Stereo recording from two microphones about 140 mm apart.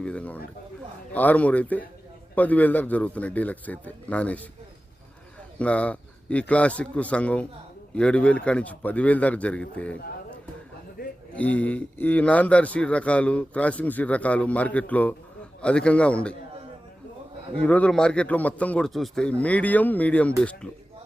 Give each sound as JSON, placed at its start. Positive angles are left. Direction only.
{"t": 0.0, "sound": "a sound", "side_deg": 10}
{"t": 1.1, "sound": "speech", "side_deg": 10}
{"t": 5.5, "sound": "speech", "side_deg": 10}
{"t": 11.0, "sound": "a sound", "side_deg": 90}
{"t": 11.3, "sound": "speech", "side_deg": 10}
{"t": 17.6, "sound": "speech", "side_deg": 10}